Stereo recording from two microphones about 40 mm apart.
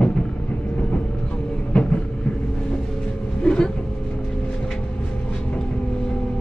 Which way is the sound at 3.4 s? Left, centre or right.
Left.